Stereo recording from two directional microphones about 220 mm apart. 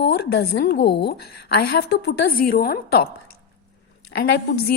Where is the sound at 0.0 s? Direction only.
45° left (ahead or behind).